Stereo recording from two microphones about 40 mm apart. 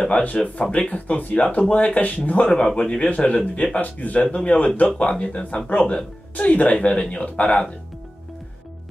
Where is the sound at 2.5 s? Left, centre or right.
Left.